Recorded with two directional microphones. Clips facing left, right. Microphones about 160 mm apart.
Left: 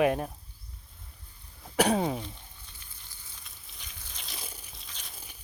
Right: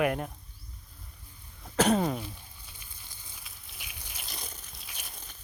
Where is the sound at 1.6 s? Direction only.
10° left (ahead or behind).